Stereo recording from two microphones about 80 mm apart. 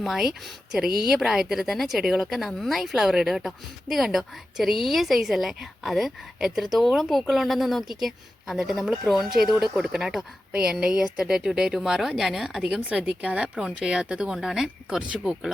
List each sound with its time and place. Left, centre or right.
0.0 s speech: centre
12.6 s speech: centre